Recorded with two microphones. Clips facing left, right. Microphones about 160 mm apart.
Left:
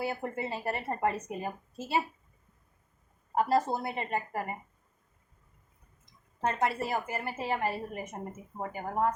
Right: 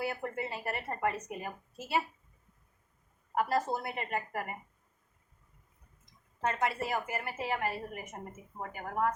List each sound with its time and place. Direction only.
0.0 s a woman's voice: 25° left (ahead or behind)
3.3 s a woman's voice: 25° left (ahead or behind)
6.4 s a woman's voice: 35° left (ahead or behind)